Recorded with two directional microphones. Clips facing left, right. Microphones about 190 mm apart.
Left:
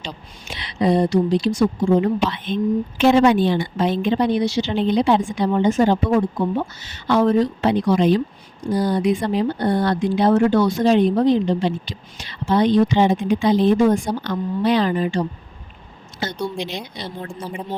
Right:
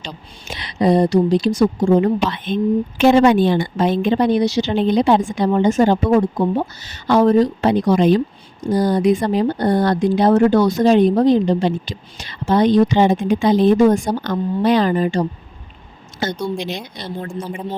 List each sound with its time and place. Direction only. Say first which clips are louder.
0.4 s speech: right 3 dB; 40° right (ahead or behind)
17.4 s speech: right 2 dB; 5° left (ahead or behind)